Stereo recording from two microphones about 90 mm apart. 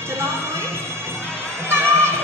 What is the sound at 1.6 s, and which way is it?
Music, 25° right (ahead or behind).